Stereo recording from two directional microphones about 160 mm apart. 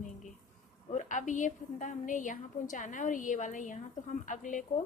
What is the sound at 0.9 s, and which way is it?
A woman's voice, 50° left (ahead or behind).